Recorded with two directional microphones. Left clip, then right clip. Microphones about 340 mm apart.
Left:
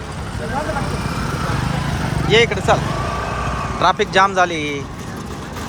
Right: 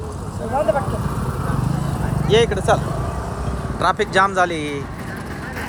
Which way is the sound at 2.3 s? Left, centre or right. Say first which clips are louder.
Left 2 dB; centre.